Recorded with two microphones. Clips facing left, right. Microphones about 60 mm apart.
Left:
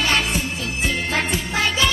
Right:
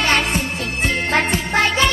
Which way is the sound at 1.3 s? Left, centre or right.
Right.